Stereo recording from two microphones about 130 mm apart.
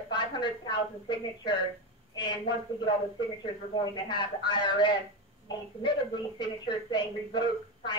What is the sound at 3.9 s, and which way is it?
A man's voice, 35° left (ahead or behind).